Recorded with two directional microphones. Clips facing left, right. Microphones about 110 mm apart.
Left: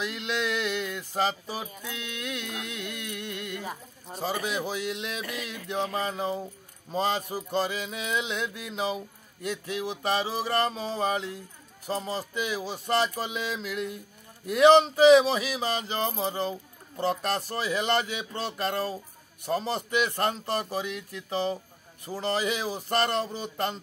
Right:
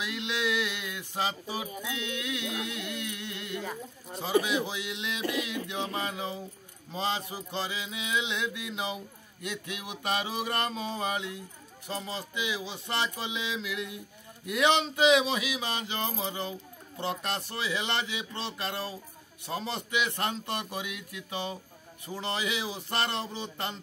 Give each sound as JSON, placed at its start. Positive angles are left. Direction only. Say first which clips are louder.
{"t": 0.0, "sound": "music", "louder": "left 2 dB", "side_deg": 50}
{"t": 3.6, "sound": "speech", "louder": "even", "side_deg": 10}
{"t": 4.2, "sound": "music", "louder": "right 3 dB", "side_deg": 40}
{"t": 5.7, "sound": "mantra", "louder": "left 4 dB", "side_deg": 40}
{"t": 11.9, "sound": "music", "louder": "left 5 dB", "side_deg": 40}
{"t": 14.4, "sound": "mantra", "louder": "left 8 dB", "side_deg": 40}
{"t": 17.0, "sound": "music", "louder": "left 5 dB", "side_deg": 40}
{"t": 19.4, "sound": "mantra", "louder": "left 6 dB", "side_deg": 45}
{"t": 22.1, "sound": "music", "louder": "left 4 dB", "side_deg": 40}